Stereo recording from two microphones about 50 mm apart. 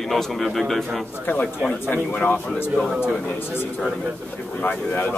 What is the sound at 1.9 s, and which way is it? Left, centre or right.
Speech, left.